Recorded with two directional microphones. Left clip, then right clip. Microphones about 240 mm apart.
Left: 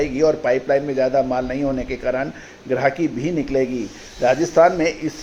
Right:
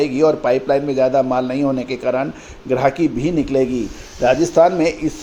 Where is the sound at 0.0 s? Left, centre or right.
Right.